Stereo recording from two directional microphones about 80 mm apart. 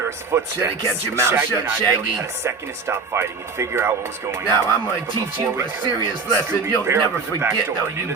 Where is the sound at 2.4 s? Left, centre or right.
Right.